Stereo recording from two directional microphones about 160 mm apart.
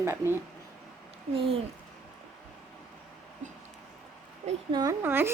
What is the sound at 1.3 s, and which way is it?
Speech, 35° right (ahead or behind).